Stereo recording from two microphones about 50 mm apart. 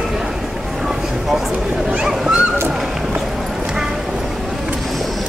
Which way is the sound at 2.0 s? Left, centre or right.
Centre.